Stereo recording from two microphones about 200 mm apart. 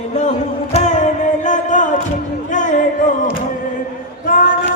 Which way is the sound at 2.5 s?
40° left (ahead or behind).